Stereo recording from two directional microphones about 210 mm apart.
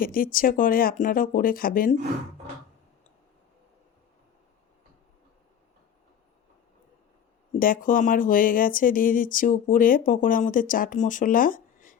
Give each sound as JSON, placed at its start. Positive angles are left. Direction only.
{"t": 0.0, "sound": "speech", "side_deg": 45}
{"t": 7.6, "sound": "speech", "side_deg": 40}